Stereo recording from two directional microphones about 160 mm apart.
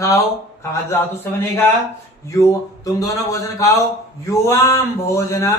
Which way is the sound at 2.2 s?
20° left (ahead or behind).